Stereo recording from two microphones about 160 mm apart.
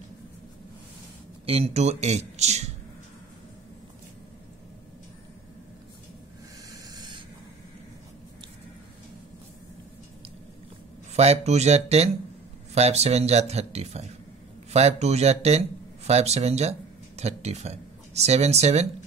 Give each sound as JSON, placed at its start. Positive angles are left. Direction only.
{"t": 1.4, "sound": "speech", "side_deg": -40}
{"t": 6.7, "sound": "a sound", "side_deg": -25}
{"t": 11.1, "sound": "speech", "side_deg": -40}